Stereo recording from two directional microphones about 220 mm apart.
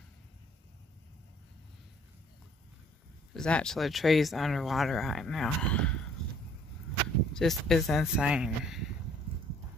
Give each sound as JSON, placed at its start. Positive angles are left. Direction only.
{"t": 3.3, "sound": "speech", "side_deg": 5}
{"t": 7.3, "sound": "speech", "side_deg": 0}